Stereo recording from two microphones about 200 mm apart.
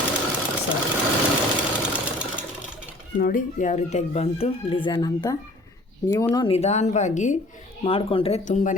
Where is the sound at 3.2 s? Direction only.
40° left (ahead or behind).